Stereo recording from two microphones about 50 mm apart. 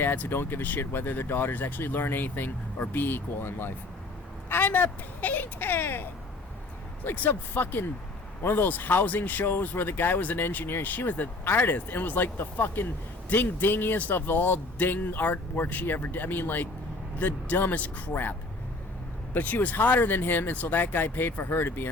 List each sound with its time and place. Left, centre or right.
0.0 s speech: left
1.5 s speech: left
1.9 s speech: left